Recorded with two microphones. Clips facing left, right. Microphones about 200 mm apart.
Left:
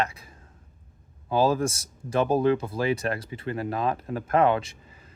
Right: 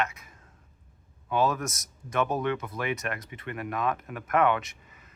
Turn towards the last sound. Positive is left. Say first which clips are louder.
# left 5 dB
turn(degrees=30)  # may be behind; listen again after turning